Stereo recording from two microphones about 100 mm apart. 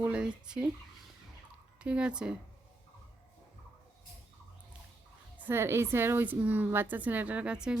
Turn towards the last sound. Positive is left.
turn(degrees=-10)  # may be behind; listen again after turning